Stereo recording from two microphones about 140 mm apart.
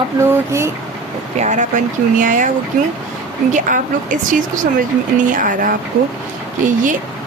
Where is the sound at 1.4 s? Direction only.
60° right (ahead or behind).